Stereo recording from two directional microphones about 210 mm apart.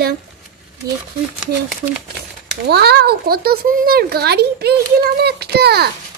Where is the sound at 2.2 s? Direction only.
50° right (ahead or behind).